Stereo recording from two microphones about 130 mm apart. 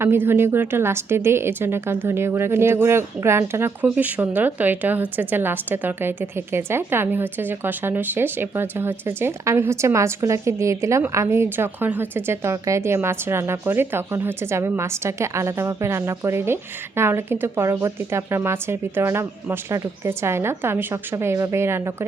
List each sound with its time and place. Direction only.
0.0 s a woman's voice: 15° right (ahead or behind)